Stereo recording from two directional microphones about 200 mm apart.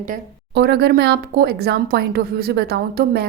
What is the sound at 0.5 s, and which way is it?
A woman's voice, 55° right (ahead or behind).